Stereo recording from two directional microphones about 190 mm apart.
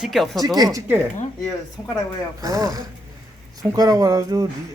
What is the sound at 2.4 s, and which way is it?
Speech, 15° right (ahead or behind).